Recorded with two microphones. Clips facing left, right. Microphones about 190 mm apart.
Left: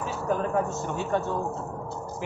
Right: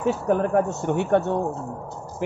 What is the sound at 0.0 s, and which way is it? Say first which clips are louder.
Speech: right 6 dB; 60° right (ahead or behind).